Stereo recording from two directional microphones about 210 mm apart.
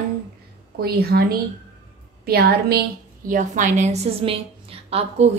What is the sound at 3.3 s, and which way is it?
A woman's voice, 40° right (ahead or behind).